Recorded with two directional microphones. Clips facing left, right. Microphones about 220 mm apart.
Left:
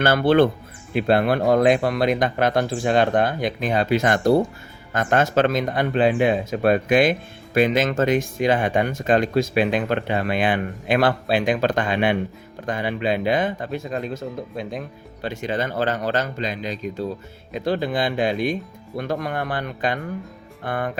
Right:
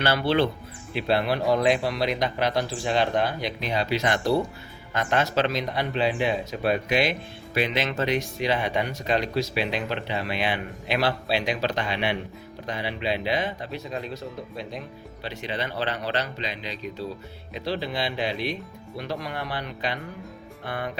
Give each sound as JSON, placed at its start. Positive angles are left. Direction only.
{"t": 0.0, "sound": "speech", "side_deg": 50}